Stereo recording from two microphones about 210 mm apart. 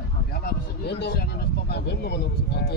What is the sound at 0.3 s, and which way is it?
Speech, 50° left (ahead or behind).